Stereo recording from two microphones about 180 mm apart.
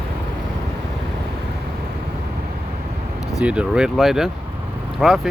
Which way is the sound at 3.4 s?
5° right (ahead or behind).